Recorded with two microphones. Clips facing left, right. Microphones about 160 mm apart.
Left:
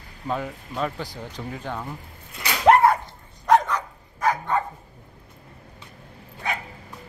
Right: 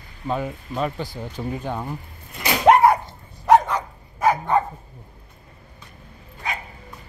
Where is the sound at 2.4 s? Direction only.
20° right (ahead or behind).